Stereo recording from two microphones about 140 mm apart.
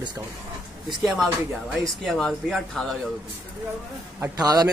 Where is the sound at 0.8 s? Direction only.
Centre (ahead or behind).